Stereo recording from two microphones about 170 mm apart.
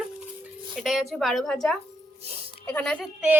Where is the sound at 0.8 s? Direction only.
Centre (ahead or behind).